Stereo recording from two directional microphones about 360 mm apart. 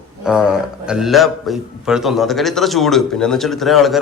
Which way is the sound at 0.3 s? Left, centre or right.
Centre.